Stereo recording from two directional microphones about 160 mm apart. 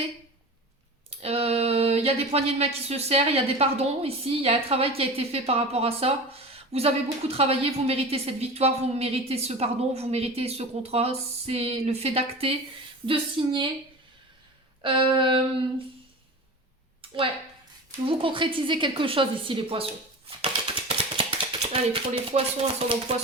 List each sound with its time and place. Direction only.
1.2 s a woman's voice: 40° right (ahead or behind)
14.8 s a woman's voice: 30° right (ahead or behind)
18.1 s a woman's voice: 30° right (ahead or behind)
20.4 s a sound: 35° right (ahead or behind)